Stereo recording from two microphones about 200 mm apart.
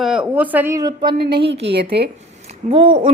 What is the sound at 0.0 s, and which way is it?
A woman's voice, 5° right (ahead or behind).